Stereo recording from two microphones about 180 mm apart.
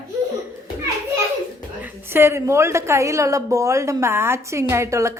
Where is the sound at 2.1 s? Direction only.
15° right (ahead or behind).